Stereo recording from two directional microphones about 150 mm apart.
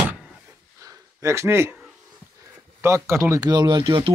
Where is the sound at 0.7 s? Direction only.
20° right (ahead or behind).